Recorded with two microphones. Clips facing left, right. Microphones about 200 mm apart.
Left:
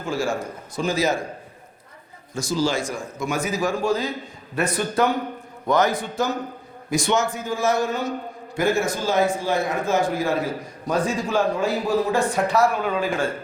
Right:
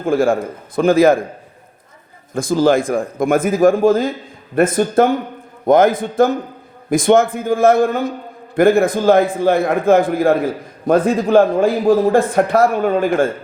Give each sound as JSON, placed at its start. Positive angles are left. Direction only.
{"t": 0.0, "sound": "a man's voice", "side_deg": -55}
{"t": 2.3, "sound": "a man's voice", "side_deg": -55}